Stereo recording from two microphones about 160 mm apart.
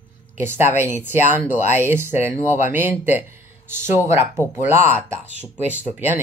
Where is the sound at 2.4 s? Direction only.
50° left (ahead or behind).